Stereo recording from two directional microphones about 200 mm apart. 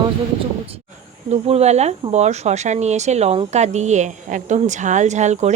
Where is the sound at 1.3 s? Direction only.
30° right (ahead or behind).